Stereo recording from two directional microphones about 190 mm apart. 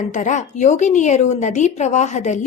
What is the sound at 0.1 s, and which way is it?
A woman's voice, 40° left (ahead or behind).